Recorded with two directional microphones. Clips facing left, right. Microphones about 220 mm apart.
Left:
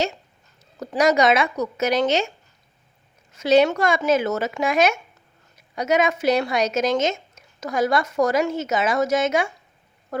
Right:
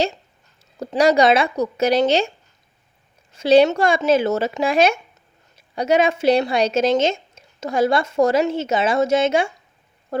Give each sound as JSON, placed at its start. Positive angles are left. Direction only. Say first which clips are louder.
{"t": 0.8, "sound": "speech", "louder": "right 3 dB", "side_deg": -30}
{"t": 3.3, "sound": "a woman's voice", "louder": "right 3 dB", "side_deg": -30}